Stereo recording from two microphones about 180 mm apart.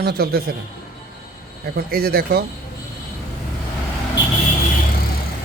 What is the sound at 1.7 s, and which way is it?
Speech, 55° right (ahead or behind).